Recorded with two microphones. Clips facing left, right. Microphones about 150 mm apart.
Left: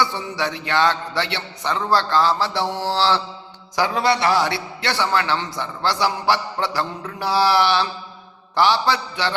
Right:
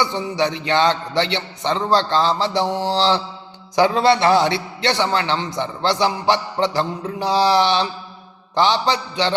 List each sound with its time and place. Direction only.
0.0 s a man's voice: 20° right (ahead or behind)